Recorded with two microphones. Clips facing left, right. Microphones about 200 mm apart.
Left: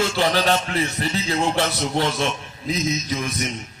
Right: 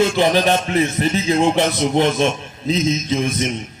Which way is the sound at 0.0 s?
20° right (ahead or behind).